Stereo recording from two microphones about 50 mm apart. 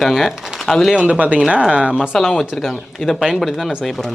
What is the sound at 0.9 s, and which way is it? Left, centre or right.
Speech, right.